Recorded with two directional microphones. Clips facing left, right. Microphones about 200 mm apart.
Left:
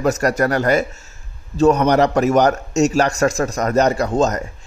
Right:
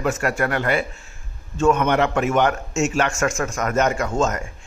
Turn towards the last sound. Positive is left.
turn(degrees=35)  # may be behind; listen again after turning